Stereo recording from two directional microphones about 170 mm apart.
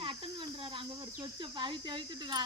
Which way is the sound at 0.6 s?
30° right (ahead or behind).